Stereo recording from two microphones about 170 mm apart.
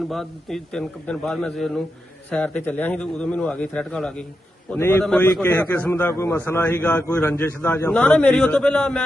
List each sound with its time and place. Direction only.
0.1 s a man's voice: centre (ahead or behind)